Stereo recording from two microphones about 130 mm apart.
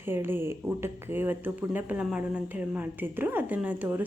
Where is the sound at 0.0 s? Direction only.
15° right (ahead or behind).